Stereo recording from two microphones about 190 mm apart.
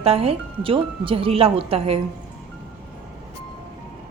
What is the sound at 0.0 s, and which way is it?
A woman's voice, 30° right (ahead or behind).